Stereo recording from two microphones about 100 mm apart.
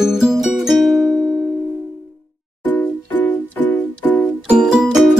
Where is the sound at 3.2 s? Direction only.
15° left (ahead or behind).